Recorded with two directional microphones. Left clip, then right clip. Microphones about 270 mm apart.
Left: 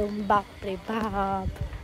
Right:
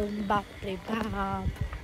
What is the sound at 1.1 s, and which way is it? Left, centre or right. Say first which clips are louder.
Speech: left 5 dB; left.